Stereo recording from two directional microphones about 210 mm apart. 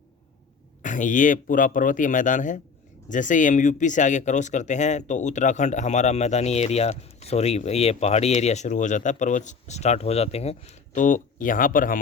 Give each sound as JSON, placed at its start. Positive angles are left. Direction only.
{"t": 0.8, "sound": "speech", "side_deg": 35}